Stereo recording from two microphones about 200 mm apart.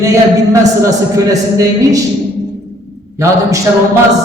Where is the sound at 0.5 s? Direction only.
15° right (ahead or behind).